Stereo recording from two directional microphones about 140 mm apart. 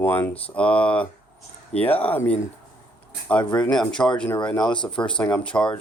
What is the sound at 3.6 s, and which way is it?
Speech, 5° left (ahead or behind).